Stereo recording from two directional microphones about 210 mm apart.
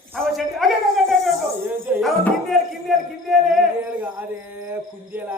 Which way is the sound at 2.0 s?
Centre (ahead or behind).